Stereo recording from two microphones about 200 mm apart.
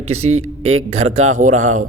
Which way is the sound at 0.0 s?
35° right (ahead or behind).